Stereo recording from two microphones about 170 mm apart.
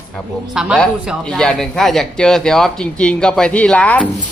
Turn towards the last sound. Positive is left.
turn(degrees=5)  # may be behind; listen again after turning